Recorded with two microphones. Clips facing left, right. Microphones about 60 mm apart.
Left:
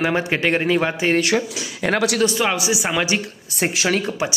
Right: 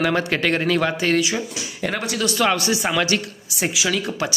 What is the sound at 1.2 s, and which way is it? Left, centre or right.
Speech, left.